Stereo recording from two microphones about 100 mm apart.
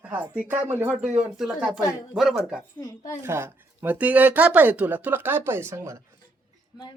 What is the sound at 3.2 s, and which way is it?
Speech, 25° right (ahead or behind).